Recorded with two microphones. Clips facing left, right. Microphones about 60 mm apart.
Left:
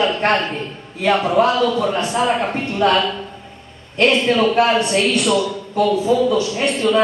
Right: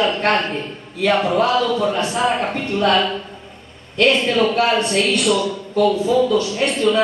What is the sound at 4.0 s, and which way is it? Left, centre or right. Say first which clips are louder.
Speech: left 1 dB; left.